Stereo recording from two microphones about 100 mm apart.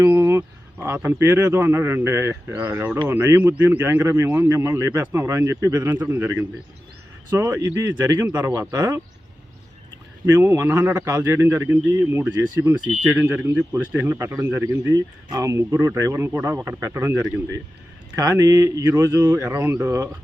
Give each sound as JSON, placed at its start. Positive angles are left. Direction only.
{"t": 0.1, "sound": "a sound", "side_deg": -25}
{"t": 0.9, "sound": "a man's voice", "side_deg": -25}
{"t": 8.4, "sound": "a man's voice", "side_deg": -20}
{"t": 10.2, "sound": "a man's voice", "side_deg": -30}
{"t": 14.9, "sound": "a man's voice", "side_deg": -40}
{"t": 18.2, "sound": "a man's voice", "side_deg": -35}